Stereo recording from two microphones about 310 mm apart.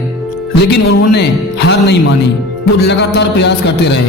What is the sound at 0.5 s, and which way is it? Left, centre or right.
Speech, left.